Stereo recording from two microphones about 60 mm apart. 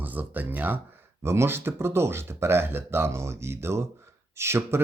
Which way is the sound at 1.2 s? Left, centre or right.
Right.